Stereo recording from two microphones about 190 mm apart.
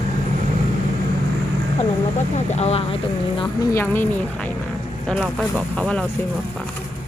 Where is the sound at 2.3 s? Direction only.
35° left (ahead or behind).